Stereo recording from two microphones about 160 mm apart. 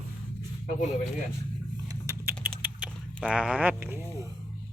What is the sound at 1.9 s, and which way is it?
Typing, 20° right (ahead or behind).